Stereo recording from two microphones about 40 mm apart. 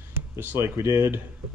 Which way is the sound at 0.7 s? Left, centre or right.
Right.